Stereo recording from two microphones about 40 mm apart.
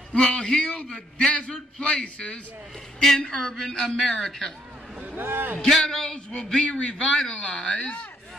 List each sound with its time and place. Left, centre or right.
0.1 s a man's voice: left
3.2 s a man's voice: centre
5.1 s a man's voice: right
5.7 s a man's voice: centre
5.9 s a man's voice: left